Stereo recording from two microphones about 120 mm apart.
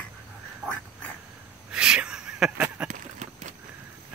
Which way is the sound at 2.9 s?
80° right.